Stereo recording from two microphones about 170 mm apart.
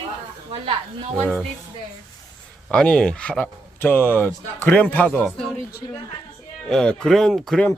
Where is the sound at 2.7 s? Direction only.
5° left (ahead or behind).